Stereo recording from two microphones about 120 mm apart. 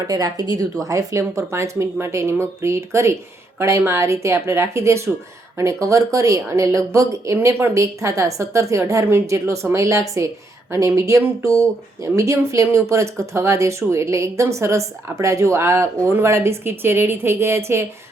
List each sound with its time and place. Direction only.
0.1 s speech: 30° right (ahead or behind)